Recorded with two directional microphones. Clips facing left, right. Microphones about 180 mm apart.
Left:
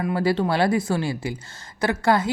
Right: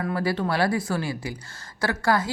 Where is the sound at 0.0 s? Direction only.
25° left (ahead or behind).